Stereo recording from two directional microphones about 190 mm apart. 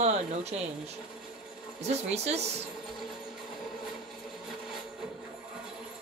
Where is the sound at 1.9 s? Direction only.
35° right (ahead or behind).